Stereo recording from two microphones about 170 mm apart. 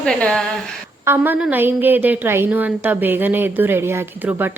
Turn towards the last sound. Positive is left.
turn(degrees=-15)  # may be behind; listen again after turning